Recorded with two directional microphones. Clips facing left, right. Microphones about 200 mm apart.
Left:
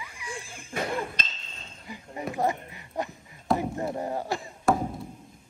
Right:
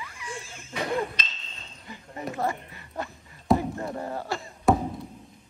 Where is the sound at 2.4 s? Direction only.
15° left (ahead or behind).